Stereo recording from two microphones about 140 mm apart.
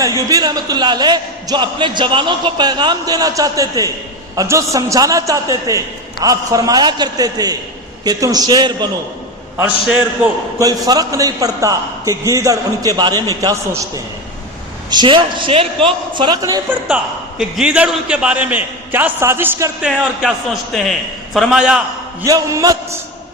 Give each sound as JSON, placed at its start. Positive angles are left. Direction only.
{"t": 0.0, "sound": "a man's voice", "side_deg": -25}
{"t": 10.2, "sound": "a man's voice", "side_deg": -10}
{"t": 10.6, "sound": "a man's voice", "side_deg": -25}
{"t": 14.8, "sound": "a man's voice", "side_deg": -35}
{"t": 16.6, "sound": "a man's voice", "side_deg": -5}
{"t": 19.8, "sound": "a man's voice", "side_deg": -5}
{"t": 22.2, "sound": "a man's voice", "side_deg": -25}